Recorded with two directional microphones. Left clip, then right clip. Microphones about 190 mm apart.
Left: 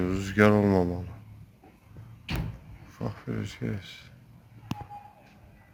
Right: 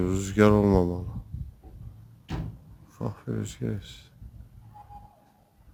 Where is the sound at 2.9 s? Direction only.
50° right (ahead or behind).